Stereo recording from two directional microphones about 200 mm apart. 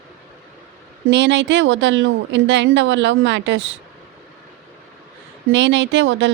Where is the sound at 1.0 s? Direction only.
60° right (ahead or behind).